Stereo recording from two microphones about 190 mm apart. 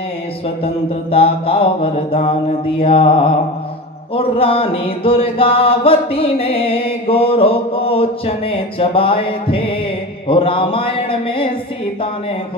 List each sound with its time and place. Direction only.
0.7 s mantra: 30° left (ahead or behind)